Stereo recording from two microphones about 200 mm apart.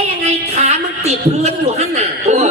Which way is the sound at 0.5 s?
35° right (ahead or behind).